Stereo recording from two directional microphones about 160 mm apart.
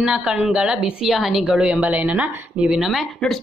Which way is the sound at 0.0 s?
5° right (ahead or behind).